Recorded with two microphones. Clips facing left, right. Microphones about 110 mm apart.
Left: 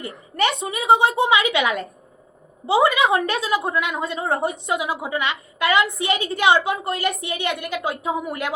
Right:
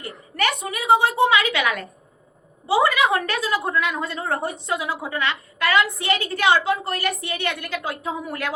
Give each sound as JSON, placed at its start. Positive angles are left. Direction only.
{"t": 0.0, "sound": "a woman's voice", "side_deg": 20}